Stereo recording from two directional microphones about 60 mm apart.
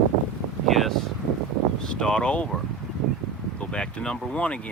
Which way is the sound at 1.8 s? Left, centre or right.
Centre.